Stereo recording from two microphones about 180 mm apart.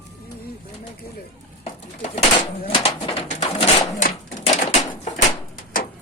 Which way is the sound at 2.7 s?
30° left (ahead or behind).